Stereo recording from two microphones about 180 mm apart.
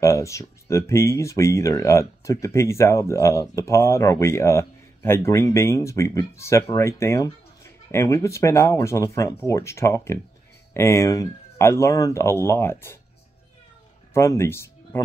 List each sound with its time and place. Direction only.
0.0 s speech: 15° left (ahead or behind)
14.1 s speech: 15° left (ahead or behind)